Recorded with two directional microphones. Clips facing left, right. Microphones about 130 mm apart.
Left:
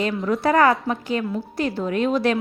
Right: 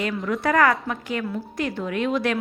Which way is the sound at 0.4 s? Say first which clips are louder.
Left 2 dB; 30° left (ahead or behind).